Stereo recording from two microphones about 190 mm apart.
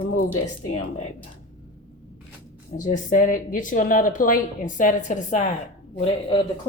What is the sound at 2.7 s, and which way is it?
Speech, 40° left (ahead or behind).